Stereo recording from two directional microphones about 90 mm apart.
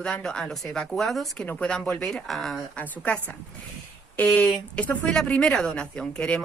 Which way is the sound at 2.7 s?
15° left (ahead or behind).